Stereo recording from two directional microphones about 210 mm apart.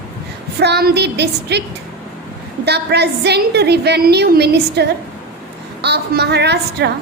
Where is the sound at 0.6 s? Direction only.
50° right (ahead or behind).